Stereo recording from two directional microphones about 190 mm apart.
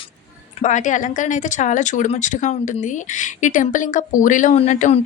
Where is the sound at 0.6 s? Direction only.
40° left (ahead or behind).